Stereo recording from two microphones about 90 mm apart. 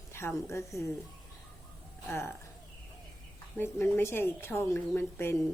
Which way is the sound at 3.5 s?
25° left (ahead or behind).